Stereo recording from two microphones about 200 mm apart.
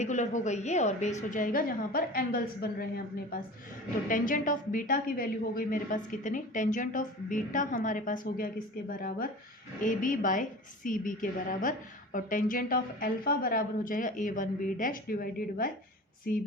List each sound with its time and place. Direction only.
0.0 s a woman's voice: 35° left (ahead or behind)